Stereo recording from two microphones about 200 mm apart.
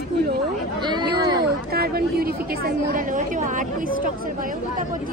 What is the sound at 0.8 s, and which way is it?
Speech, 20° right (ahead or behind).